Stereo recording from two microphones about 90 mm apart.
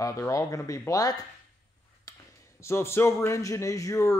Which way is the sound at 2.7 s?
30° left (ahead or behind).